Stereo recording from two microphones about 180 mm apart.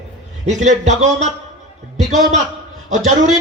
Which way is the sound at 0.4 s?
40° right (ahead or behind).